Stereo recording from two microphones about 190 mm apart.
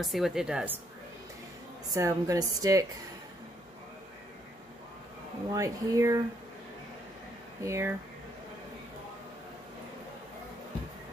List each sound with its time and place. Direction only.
0.0 s a woman's voice: centre (ahead or behind)
2.0 s a woman's voice: 15° right (ahead or behind)
5.5 s a woman's voice: 15° right (ahead or behind)
7.6 s a woman's voice: 15° right (ahead or behind)